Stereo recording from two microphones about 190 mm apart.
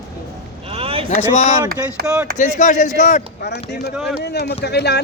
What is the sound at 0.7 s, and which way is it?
Vehicle, 30° right (ahead or behind).